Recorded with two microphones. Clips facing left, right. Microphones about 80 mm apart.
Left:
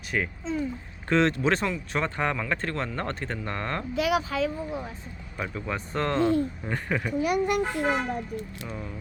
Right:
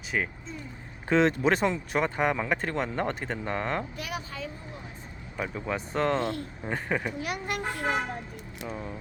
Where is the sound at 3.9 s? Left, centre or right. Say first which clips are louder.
Left 11 dB; left.